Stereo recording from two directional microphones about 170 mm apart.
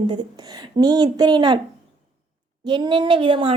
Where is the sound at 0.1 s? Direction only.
25° right (ahead or behind).